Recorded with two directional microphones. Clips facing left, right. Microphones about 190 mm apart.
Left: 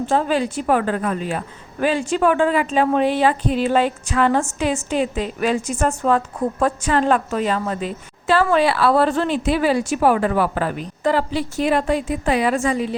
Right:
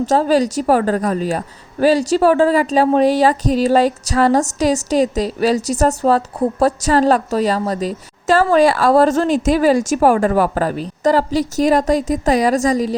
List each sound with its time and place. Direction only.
0.0 s a woman's voice: 40° right (ahead or behind)